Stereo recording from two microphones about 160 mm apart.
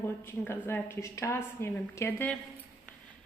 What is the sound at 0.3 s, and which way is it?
A woman's voice, 15° left (ahead or behind).